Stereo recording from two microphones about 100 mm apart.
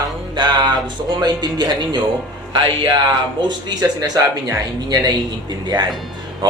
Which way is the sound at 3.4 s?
40° right (ahead or behind).